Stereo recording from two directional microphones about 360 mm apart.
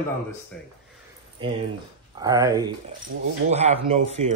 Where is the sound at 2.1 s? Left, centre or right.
Centre.